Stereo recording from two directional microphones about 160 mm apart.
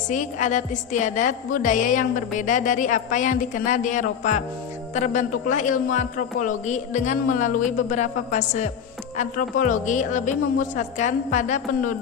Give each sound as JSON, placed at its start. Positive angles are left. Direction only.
{"t": 0.1, "sound": "a man's voice", "side_deg": 50}